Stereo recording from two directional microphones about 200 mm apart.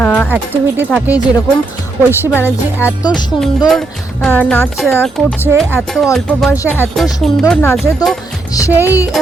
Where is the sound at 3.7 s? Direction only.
5° left (ahead or behind).